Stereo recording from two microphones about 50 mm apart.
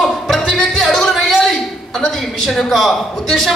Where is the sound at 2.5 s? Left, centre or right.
Centre.